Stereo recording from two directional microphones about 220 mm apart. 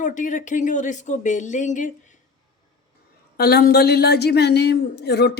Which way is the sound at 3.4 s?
45° left (ahead or behind).